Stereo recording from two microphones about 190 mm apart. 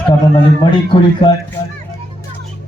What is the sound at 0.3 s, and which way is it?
Speech, 25° left (ahead or behind).